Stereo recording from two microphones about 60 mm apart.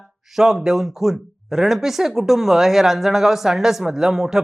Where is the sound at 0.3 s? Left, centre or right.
Centre.